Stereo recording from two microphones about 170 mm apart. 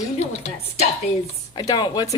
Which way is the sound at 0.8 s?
35° left (ahead or behind).